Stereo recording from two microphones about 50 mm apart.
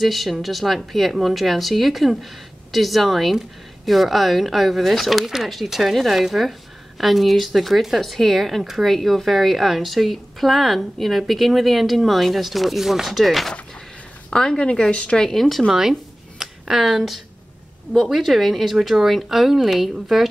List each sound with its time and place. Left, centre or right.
0.0 s speech: centre
14.3 s speech: centre
15.2 s speech: centre
15.7 s a sound: centre
17.9 s speech: centre